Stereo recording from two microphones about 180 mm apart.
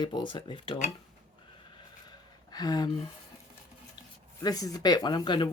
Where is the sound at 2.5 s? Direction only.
20° left (ahead or behind).